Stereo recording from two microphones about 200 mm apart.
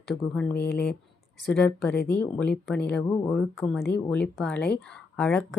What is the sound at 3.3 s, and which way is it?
Speech, 5° left (ahead or behind).